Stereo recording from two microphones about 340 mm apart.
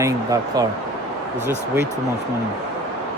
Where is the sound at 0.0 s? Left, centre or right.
Centre.